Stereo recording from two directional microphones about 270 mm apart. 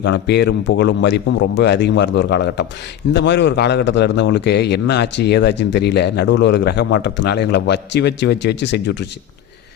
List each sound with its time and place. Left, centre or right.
0.0 s a man's voice: left